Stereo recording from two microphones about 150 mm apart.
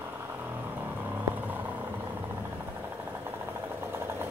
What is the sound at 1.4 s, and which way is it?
Vehicle, 10° right (ahead or behind).